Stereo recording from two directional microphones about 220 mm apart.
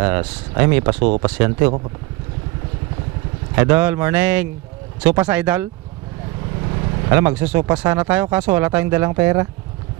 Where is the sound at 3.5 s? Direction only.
10° right (ahead or behind).